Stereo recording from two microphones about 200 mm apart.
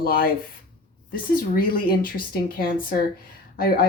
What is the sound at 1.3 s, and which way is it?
Speech, 45° left (ahead or behind).